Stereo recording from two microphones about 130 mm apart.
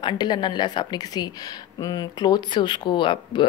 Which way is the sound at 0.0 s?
35° left (ahead or behind).